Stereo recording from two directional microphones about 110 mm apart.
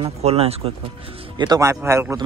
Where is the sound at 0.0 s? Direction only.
65° right (ahead or behind).